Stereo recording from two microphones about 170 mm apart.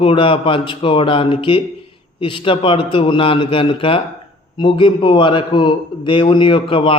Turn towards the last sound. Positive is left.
turn(degrees=30)  # may be behind; listen again after turning